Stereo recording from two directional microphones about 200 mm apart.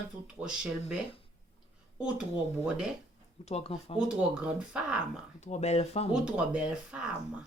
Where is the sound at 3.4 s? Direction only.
30° left (ahead or behind).